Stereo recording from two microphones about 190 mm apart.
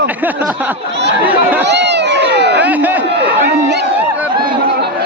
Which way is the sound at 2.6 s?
10° right (ahead or behind).